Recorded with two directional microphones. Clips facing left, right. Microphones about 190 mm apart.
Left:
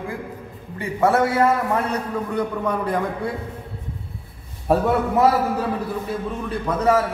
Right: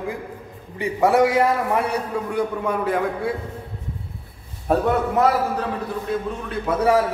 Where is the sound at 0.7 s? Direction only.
15° right (ahead or behind).